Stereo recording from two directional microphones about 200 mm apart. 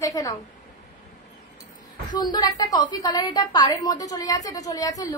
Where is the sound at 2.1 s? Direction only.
20° left (ahead or behind).